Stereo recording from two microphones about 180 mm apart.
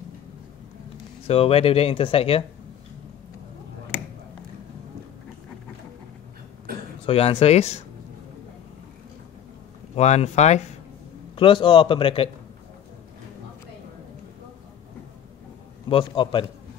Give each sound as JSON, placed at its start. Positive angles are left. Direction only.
{"t": 1.2, "sound": "speech", "side_deg": 30}
{"t": 6.7, "sound": "a sound", "side_deg": -55}
{"t": 7.1, "sound": "speech", "side_deg": 35}
{"t": 9.9, "sound": "speech", "side_deg": 40}
{"t": 11.3, "sound": "speech", "side_deg": 25}
{"t": 15.9, "sound": "speech", "side_deg": 25}